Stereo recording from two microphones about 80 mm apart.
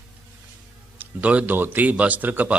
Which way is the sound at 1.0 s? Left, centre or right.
Centre.